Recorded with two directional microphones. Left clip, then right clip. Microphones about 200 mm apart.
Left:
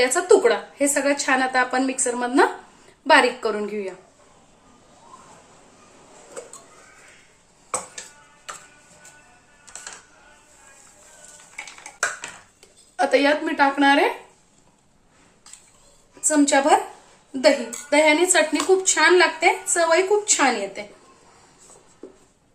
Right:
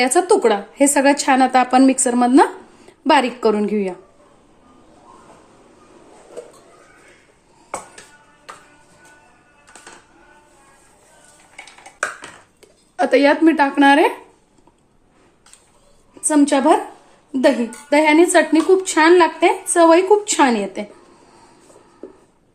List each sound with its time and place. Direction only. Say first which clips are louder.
0.0 s a woman's voice: right 2 dB; 50° right (ahead or behind)
13.0 s a woman's voice: right 5 dB; 35° right (ahead or behind); by 14.1 s 50° right (ahead or behind)
16.2 s speech: right 3 dB; 40° right (ahead or behind)